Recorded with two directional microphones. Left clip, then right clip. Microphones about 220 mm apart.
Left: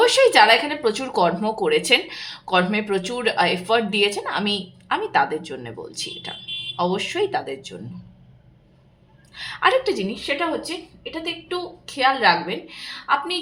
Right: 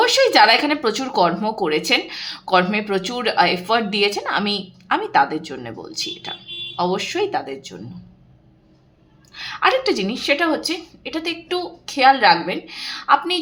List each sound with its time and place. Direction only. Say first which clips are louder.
0.0 s speech: right 1 dB; 10° right (ahead or behind)
9.3 s a sound: right 1 dB; 10° right (ahead or behind)
9.9 s a woman's voice: right 5 dB; 30° right (ahead or behind)
11.9 s a woman's voice: right 4 dB; 25° right (ahead or behind)